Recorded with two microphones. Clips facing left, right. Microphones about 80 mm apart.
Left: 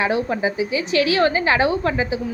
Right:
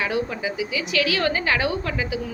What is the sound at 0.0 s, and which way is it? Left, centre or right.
A woman's voice, left.